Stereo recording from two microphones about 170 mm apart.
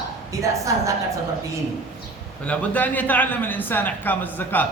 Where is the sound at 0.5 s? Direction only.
20° right (ahead or behind).